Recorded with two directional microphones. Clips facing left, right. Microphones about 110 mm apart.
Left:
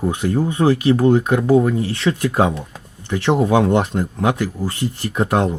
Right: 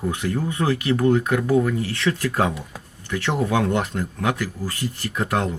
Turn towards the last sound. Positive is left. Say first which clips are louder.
# left 5 dB
turn(degrees=25)  # may be behind; listen again after turning